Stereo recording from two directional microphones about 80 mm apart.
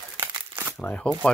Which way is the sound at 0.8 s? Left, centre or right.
Centre.